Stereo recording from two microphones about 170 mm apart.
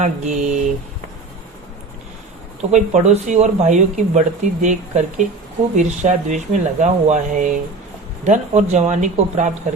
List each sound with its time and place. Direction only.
0.0 s speech: 45° right (ahead or behind)
2.6 s speech: 40° right (ahead or behind)